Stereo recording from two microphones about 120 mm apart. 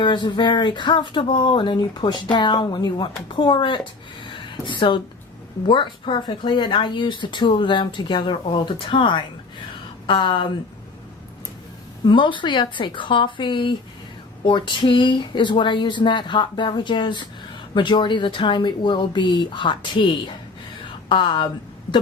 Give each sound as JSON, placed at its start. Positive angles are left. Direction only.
{"t": 0.0, "sound": "speech", "side_deg": 40}
{"t": 4.2, "sound": "a sound", "side_deg": 40}
{"t": 5.6, "sound": "speech", "side_deg": 45}
{"t": 12.0, "sound": "speech", "side_deg": 40}